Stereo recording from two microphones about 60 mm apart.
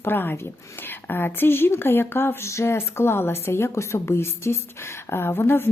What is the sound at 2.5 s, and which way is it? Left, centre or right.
A woman's voice, left.